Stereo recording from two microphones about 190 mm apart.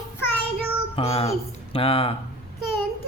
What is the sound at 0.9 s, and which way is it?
Speech, 30° left (ahead or behind).